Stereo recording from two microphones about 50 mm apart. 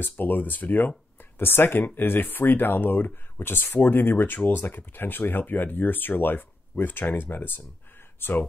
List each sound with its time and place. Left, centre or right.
0.0 s speech: left